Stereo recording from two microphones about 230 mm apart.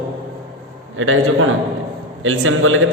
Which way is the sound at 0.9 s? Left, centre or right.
Right.